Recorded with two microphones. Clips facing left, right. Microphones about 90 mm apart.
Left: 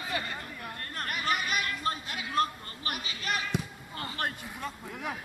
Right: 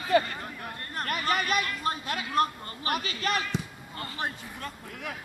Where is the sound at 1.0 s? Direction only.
50° right (ahead or behind).